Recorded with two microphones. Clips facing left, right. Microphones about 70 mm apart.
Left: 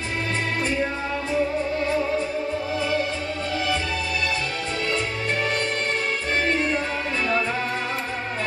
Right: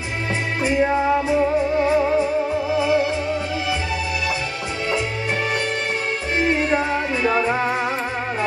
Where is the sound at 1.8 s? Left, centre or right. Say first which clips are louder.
Right 6 dB; centre.